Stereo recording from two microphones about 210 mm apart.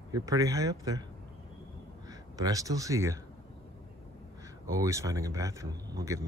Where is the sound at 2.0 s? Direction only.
15° right (ahead or behind).